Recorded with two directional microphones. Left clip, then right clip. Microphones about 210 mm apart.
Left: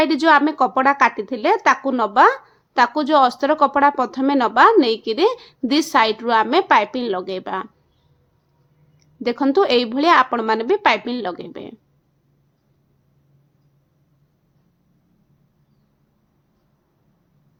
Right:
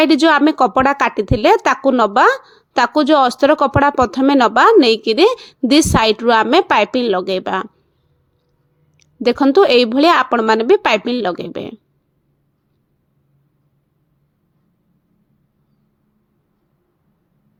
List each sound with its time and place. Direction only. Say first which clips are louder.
0.0 s speech: right 3 dB; 35° right (ahead or behind)
9.0 s speech: right 7 dB; 30° right (ahead or behind)